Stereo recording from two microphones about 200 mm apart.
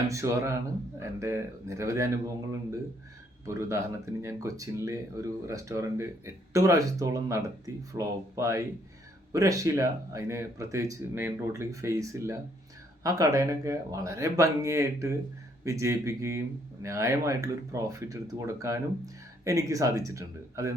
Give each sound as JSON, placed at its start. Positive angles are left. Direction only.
{"t": 0.1, "sound": "speech", "side_deg": -15}